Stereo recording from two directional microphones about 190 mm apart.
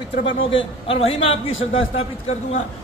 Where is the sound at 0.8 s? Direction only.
30° left (ahead or behind).